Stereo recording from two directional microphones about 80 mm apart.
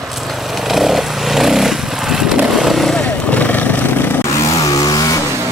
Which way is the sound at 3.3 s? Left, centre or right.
Centre.